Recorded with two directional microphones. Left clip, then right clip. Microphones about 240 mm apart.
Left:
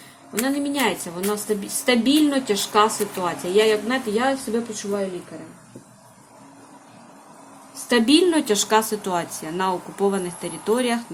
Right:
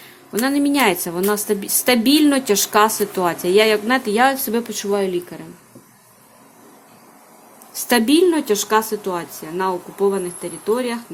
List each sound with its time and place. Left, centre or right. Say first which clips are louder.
0.4 s a woman's voice: right 6 dB; right
8.0 s speech: right 2 dB; centre